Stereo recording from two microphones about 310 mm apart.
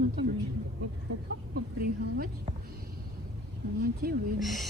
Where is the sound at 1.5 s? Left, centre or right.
Right.